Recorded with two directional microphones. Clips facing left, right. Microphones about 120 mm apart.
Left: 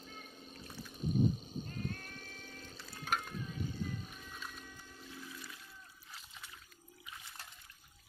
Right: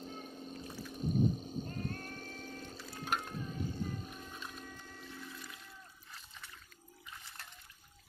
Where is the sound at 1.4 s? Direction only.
40° right (ahead or behind).